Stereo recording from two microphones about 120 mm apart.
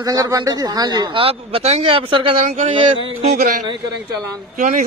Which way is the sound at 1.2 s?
55° right (ahead or behind).